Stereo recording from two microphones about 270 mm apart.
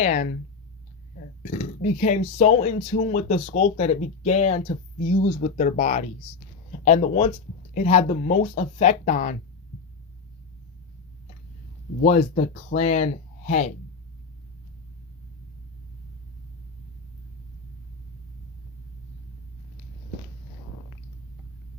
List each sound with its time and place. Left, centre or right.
0.0 s speech: left
1.4 s speech: left
12.0 s speech: left